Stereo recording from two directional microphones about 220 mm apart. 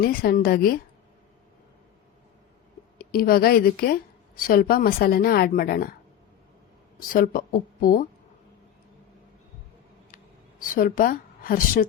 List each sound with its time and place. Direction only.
0.0 s a woman's voice: 40° left (ahead or behind)
3.0 s a woman's voice: 40° left (ahead or behind)
7.1 s speech: 40° left (ahead or behind)
10.8 s speech: 40° left (ahead or behind)